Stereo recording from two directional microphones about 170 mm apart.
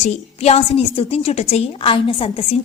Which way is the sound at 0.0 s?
40° left (ahead or behind).